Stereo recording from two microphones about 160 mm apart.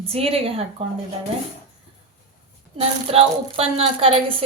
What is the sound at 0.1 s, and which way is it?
Speech, 40° right (ahead or behind).